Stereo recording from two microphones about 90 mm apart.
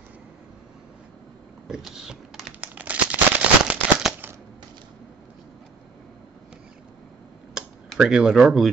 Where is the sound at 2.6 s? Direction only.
15° right (ahead or behind).